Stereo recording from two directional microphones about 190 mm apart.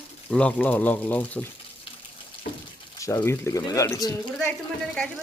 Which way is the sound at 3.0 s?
15° left (ahead or behind).